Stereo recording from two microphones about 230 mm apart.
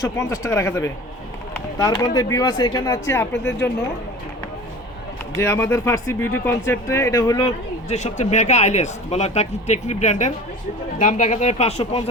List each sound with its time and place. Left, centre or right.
0.0 s speech: centre
5.4 s speech: centre
7.9 s speech: left